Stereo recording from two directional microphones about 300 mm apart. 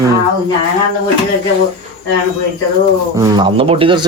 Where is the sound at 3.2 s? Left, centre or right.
Centre.